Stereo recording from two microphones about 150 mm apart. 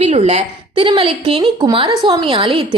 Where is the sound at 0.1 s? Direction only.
45° right (ahead or behind).